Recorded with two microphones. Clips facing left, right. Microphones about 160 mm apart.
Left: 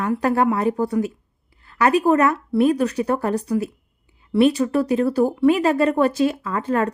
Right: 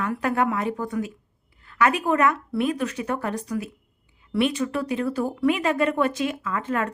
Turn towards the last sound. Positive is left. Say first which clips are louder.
# left 5 dB
turn(degrees=35)  # may be behind; listen again after turning